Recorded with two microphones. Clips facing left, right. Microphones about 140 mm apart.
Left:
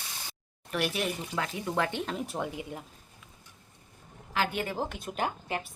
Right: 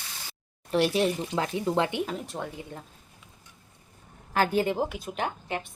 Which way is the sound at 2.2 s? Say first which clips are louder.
Left 1 dB; 10° left (ahead or behind).